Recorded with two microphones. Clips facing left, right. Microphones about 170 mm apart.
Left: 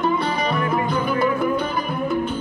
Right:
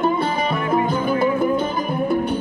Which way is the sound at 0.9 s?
45° right (ahead or behind).